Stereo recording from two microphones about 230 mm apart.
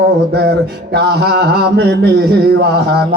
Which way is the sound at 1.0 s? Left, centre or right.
Right.